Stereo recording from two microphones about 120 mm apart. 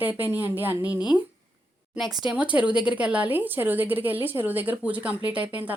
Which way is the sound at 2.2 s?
10° right (ahead or behind).